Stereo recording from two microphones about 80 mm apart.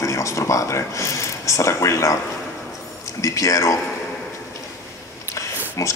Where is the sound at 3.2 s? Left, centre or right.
Left.